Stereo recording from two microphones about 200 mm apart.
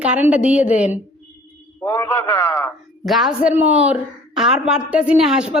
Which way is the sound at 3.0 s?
Centre (ahead or behind).